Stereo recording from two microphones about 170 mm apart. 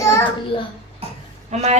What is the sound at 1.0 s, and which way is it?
Cough, 35° right (ahead or behind).